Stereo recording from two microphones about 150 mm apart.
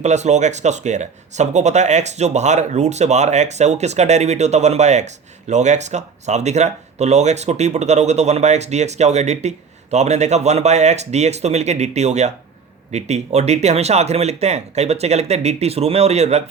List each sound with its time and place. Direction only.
0.0 s speech: 50° right (ahead or behind)